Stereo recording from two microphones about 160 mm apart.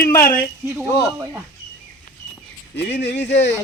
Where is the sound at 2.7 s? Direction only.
90° left.